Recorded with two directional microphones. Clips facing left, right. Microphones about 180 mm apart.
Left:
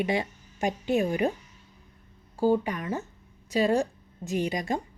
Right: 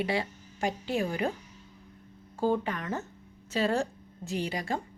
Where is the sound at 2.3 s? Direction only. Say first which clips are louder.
Left 4 dB; 10° left (ahead or behind).